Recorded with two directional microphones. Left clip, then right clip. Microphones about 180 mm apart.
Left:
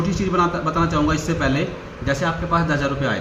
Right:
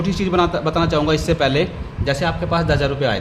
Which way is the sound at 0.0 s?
65° right (ahead or behind).